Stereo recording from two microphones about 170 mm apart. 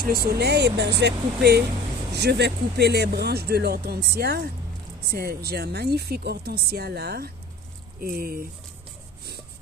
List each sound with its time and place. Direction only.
0.0 s speech: 65° right (ahead or behind)